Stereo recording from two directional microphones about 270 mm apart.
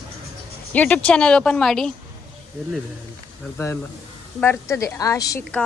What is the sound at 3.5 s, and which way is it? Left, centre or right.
A woman's voice, centre.